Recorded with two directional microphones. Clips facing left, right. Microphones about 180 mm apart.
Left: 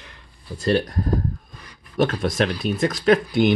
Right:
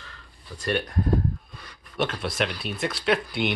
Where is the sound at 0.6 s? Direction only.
35° left (ahead or behind).